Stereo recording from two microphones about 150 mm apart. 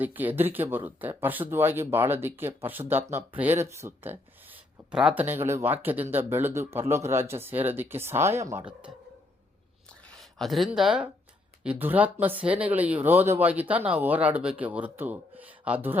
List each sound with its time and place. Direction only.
0.0 s speech: 10° right (ahead or behind)
10.1 s speech: centre (ahead or behind)